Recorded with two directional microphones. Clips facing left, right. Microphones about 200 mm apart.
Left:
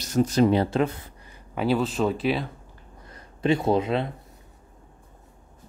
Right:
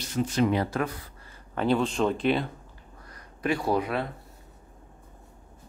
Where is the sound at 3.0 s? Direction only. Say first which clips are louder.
Left 5 dB; 25° left (ahead or behind).